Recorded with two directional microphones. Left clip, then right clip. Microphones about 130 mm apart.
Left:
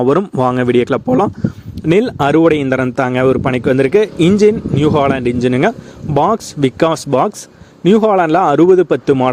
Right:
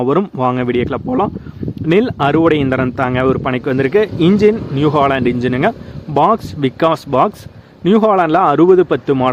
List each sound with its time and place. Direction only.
0.0 s speech: 55° left (ahead or behind); by 9.1 s 30° left (ahead or behind)